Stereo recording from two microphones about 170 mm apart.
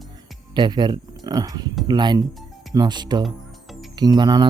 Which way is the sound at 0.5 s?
25° right (ahead or behind).